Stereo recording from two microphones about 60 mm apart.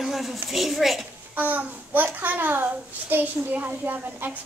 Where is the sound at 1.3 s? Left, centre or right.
Right.